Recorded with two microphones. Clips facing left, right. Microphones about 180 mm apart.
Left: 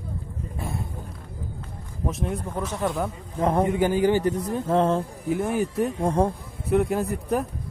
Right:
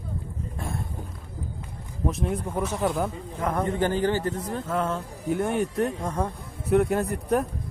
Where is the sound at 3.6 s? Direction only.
10° left (ahead or behind).